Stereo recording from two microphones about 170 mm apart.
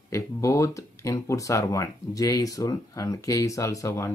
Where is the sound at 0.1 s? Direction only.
20° left (ahead or behind).